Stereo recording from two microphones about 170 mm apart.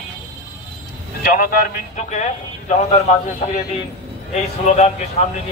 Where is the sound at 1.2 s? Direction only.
60° left (ahead or behind); by 3.2 s 45° left (ahead or behind).